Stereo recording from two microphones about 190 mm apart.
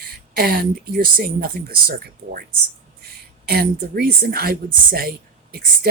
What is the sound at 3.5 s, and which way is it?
Speech, 55° right (ahead or behind).